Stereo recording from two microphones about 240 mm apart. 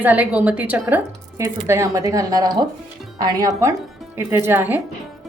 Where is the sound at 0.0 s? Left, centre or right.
Centre.